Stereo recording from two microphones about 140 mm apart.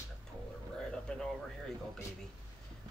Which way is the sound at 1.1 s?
5° left (ahead or behind).